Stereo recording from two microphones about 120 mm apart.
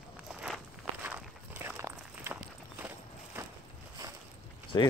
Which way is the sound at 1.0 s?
15° right (ahead or behind).